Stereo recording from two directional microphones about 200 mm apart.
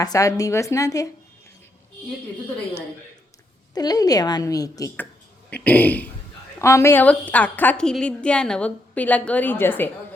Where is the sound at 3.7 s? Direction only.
20° left (ahead or behind).